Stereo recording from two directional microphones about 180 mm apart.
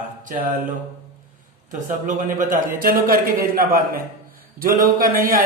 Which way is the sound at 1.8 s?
45° right (ahead or behind).